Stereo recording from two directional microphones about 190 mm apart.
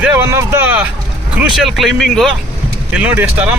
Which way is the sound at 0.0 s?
10° right (ahead or behind).